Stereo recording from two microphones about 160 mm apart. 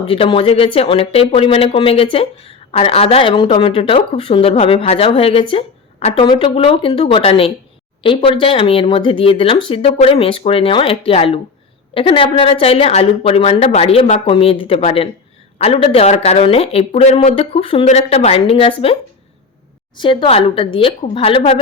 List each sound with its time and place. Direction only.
0.1 s speech: 35° left (ahead or behind)
20.0 s speech: 30° left (ahead or behind)